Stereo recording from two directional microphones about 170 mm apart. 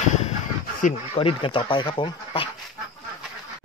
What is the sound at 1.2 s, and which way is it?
Speech, 30° left (ahead or behind).